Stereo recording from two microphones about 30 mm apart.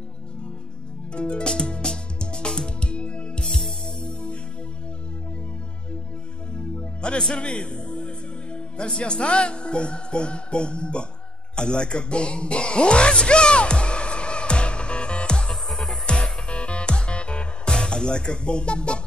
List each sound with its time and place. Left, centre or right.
1.1 s speech: left
1.5 s music: left
3.4 s music: centre
6.5 s music: left
7.2 s music: left
8.9 s speech: left
11.5 s music: left
15.5 s music: centre
16.4 s music: left
17.6 s speech: left